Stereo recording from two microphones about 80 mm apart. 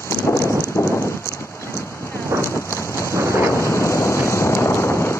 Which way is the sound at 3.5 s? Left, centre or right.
Left.